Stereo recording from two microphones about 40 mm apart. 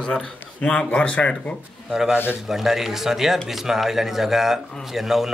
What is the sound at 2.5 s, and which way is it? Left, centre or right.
A man's voice, centre.